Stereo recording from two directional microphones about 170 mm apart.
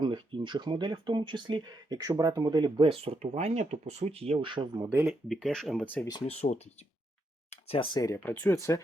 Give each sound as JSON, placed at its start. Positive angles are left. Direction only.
{"t": 0.0, "sound": "speech", "side_deg": -30}
{"t": 4.9, "sound": "speech", "side_deg": -10}
{"t": 5.3, "sound": "speech", "side_deg": 0}
{"t": 6.1, "sound": "speech", "side_deg": 25}
{"t": 6.3, "sound": "speech", "side_deg": 40}
{"t": 8.0, "sound": "speech", "side_deg": 15}